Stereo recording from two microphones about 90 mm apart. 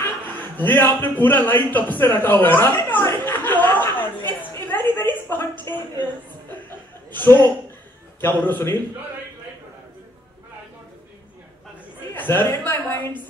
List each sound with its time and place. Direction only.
0.6 s a man's voice: 20° left (ahead or behind)
4.6 s a sound: 20° left (ahead or behind)
7.1 s a man's voice: 20° left (ahead or behind)
12.1 s a woman's voice: 25° left (ahead or behind)